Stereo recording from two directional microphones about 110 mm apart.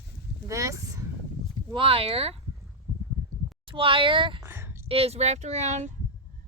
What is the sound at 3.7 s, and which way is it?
Speech, 50° right (ahead or behind).